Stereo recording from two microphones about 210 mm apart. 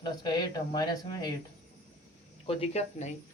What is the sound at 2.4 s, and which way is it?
Speech, 30° left (ahead or behind).